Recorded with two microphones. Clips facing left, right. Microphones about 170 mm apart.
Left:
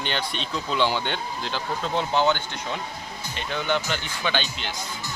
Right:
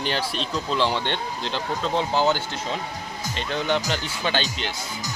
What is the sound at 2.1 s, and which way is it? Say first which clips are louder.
Speech: left 1 dB; 35° right (ahead or behind).